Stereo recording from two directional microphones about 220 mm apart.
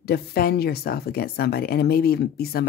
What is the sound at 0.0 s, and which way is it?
A woman's voice, 45° left (ahead or behind).